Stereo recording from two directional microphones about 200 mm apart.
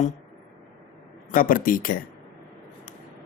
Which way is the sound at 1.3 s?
45° left (ahead or behind).